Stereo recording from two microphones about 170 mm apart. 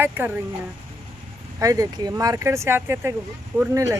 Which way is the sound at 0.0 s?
10° right (ahead or behind).